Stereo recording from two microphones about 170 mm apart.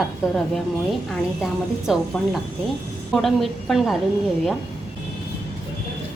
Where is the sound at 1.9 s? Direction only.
Centre (ahead or behind).